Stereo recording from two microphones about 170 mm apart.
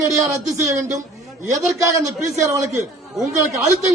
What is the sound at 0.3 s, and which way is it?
A man's voice, 20° right (ahead or behind).